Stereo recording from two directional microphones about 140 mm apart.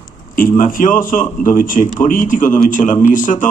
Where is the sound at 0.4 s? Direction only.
85° left.